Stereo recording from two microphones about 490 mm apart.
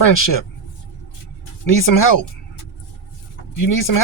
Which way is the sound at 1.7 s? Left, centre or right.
Left.